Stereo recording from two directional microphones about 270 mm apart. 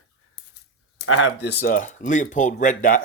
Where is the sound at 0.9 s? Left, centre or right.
Left.